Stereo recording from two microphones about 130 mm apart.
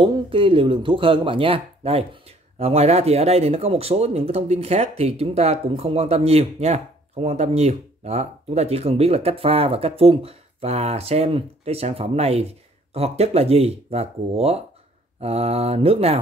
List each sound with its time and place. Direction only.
0.0 s speech: 40° right (ahead or behind)